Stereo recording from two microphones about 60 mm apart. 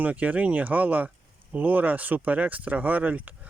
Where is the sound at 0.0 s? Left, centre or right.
Right.